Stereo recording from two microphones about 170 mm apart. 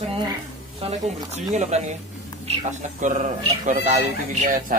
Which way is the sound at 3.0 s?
50° right (ahead or behind).